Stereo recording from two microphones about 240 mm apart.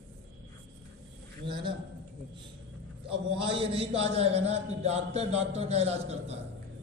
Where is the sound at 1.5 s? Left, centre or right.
Centre.